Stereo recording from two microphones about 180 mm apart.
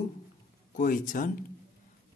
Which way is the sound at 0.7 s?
45° left (ahead or behind).